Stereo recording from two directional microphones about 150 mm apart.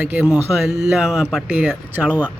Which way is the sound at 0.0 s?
10° right (ahead or behind).